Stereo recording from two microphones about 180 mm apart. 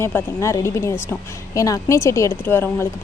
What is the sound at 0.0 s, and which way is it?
A woman's voice, 15° left (ahead or behind).